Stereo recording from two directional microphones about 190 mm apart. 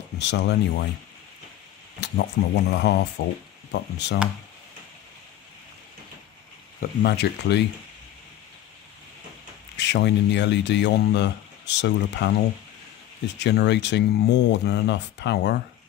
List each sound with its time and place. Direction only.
0.2 s speech: 65° left (ahead or behind)
2.0 s speech: 65° left (ahead or behind)
6.8 s speech: 55° left (ahead or behind)
9.8 s speech: 65° left (ahead or behind)